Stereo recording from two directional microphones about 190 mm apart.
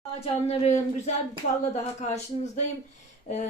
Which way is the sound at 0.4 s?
35° left (ahead or behind).